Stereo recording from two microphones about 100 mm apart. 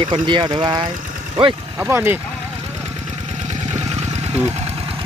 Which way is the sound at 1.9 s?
20° right (ahead or behind).